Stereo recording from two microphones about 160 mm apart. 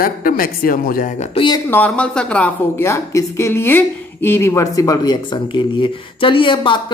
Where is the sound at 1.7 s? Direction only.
10° left (ahead or behind).